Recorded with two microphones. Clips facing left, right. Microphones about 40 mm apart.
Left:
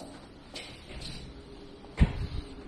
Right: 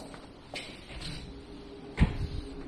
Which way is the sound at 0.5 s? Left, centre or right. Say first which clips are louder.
Right 3 dB; right.